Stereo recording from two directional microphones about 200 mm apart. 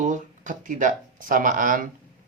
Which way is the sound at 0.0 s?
40° right (ahead or behind).